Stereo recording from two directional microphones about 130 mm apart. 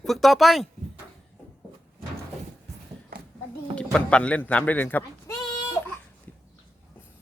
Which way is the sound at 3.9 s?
10° left (ahead or behind).